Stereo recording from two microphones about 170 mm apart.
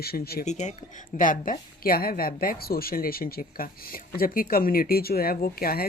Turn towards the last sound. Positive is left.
turn(degrees=60)  # may be behind; listen again after turning